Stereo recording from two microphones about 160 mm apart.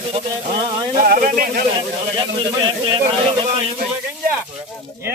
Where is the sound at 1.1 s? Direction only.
70° right (ahead or behind).